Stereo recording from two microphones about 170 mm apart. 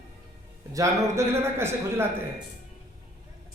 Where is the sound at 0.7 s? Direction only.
20° right (ahead or behind).